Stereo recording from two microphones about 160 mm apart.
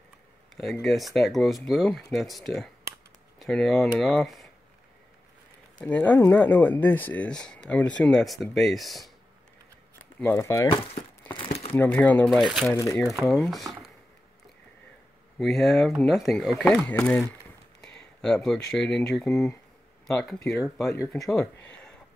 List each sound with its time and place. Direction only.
0.8 s speech: centre (ahead or behind)
5.8 s speech: 10° left (ahead or behind)
10.2 s speech: 15° left (ahead or behind)
11.2 s crumpling: 35° left (ahead or behind)
11.7 s speech: 10° left (ahead or behind)
13.2 s speech: centre (ahead or behind)
15.3 s speech: centre (ahead or behind)